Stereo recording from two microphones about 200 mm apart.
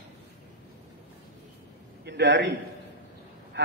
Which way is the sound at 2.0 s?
60° right (ahead or behind).